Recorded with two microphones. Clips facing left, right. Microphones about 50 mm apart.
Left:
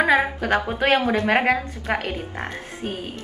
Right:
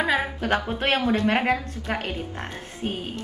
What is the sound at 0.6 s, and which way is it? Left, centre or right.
A woman's voice, left.